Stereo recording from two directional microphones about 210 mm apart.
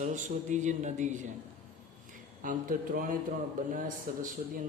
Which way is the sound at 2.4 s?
40° right (ahead or behind).